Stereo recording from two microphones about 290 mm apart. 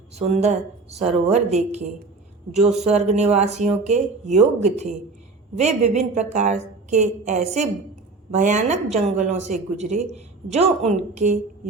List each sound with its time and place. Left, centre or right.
0.2 s speech: right